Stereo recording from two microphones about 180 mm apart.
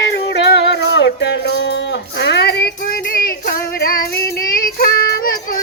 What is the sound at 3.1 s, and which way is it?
Child singing, 50° left (ahead or behind).